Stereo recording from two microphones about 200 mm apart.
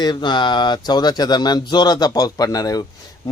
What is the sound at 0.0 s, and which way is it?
A man's voice, 20° left (ahead or behind).